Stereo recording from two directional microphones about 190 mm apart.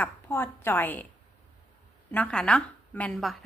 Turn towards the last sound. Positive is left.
turn(degrees=0)  # may be behind; listen again after turning